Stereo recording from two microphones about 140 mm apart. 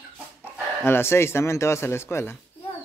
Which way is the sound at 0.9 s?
15° left (ahead or behind).